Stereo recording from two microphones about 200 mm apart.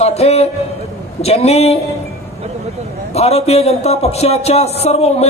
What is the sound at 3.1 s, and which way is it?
Speech, 30° left (ahead or behind).